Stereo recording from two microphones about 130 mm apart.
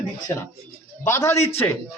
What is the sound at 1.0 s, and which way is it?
Speech, 20° left (ahead or behind).